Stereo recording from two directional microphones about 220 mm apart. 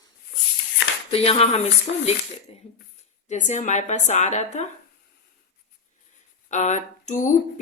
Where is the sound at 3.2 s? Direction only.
35° left (ahead or behind).